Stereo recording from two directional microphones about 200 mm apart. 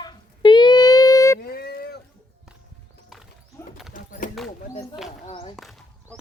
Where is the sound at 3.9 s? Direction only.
40° left (ahead or behind).